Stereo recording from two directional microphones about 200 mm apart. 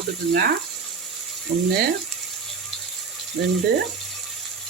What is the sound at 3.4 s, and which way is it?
Speech, 50° right (ahead or behind).